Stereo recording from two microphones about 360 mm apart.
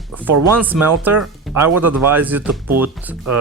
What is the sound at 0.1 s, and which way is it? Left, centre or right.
Speech, centre.